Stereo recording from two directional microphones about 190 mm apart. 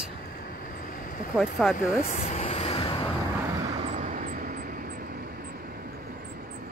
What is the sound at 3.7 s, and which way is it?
Vehicle, 35° right (ahead or behind).